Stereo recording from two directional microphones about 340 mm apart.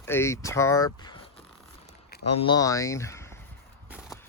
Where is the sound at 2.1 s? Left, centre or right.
Left.